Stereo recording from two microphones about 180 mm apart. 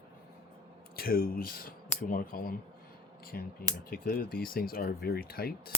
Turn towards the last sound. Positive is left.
turn(degrees=55)  # may be behind; listen again after turning